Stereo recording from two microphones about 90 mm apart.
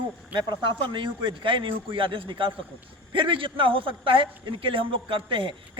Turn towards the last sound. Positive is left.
turn(degrees=-70)  # may be behind; listen again after turning